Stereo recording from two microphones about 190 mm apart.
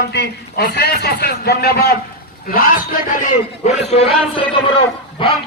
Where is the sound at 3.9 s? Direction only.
30° left (ahead or behind).